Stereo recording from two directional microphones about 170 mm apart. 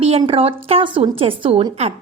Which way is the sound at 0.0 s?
35° right (ahead or behind).